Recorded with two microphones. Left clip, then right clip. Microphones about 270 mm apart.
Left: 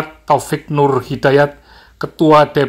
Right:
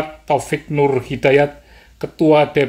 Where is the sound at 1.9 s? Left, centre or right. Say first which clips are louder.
Left 3 dB; centre.